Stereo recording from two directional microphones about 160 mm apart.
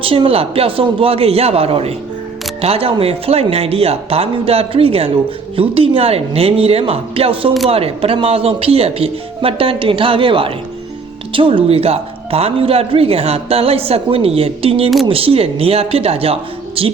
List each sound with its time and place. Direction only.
0.0 s a woman's voice: 35° right (ahead or behind)